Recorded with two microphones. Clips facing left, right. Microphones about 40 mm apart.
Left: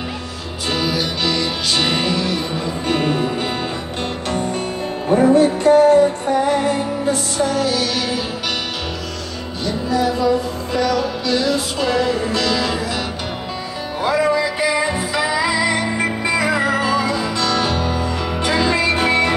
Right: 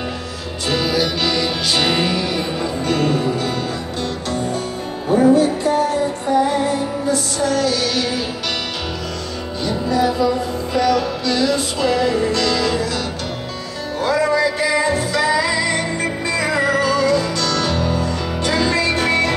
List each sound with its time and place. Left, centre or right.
0.7 s music: centre
2.9 s music: centre
5.3 s music: left
7.4 s music: centre
7.8 s music: centre
9.7 s music: centre
13.9 s music: centre